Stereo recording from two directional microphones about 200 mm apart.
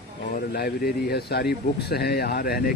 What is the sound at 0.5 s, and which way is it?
Speech, 50° left (ahead or behind).